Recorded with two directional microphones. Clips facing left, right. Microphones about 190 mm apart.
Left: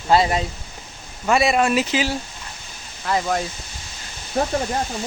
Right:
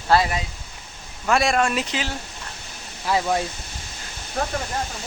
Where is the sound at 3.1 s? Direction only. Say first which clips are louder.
Even; 5° right (ahead or behind).